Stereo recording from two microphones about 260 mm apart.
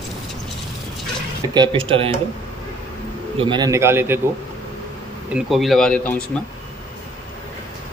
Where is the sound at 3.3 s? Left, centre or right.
Centre.